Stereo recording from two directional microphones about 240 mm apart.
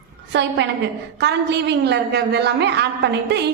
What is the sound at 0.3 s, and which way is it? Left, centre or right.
A woman's voice, right.